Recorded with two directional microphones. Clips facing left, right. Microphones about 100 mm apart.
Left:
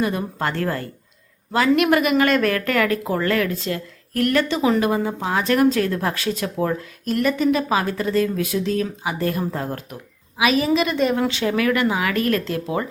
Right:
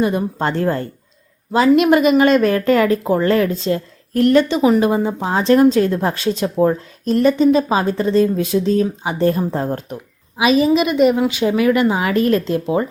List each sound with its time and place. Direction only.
0.0 s speech: 25° right (ahead or behind)